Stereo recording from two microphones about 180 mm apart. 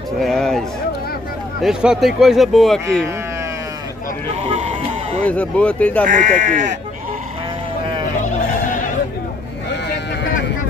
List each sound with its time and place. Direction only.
0.2 s speech: centre (ahead or behind)
4.5 s music: 35° right (ahead or behind)
5.2 s speech: 5° left (ahead or behind)
6.0 s speech: 45° right (ahead or behind)